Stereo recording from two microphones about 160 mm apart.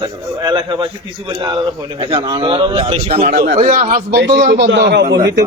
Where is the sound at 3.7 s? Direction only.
60° right (ahead or behind).